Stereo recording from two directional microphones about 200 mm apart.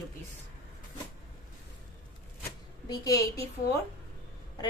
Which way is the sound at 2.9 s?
15° left (ahead or behind).